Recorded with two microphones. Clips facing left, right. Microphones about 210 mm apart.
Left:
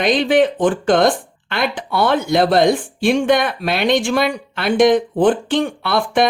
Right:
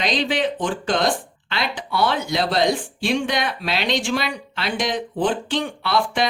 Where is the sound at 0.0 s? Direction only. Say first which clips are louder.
Left 8 dB; 55° left (ahead or behind).